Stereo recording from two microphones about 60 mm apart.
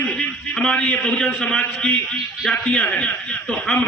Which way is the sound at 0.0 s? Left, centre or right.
Centre.